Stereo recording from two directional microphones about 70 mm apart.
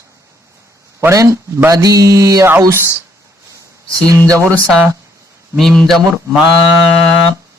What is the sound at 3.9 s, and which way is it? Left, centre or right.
Mantra, right.